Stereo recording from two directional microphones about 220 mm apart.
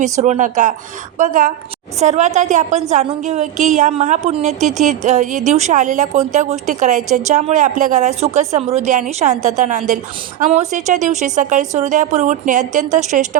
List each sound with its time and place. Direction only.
0.0 s a woman's voice: 30° right (ahead or behind)